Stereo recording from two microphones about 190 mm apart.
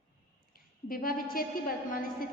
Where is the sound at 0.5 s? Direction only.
50° left (ahead or behind).